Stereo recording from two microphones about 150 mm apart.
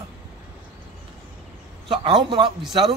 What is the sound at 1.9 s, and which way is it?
Speech, 35° right (ahead or behind).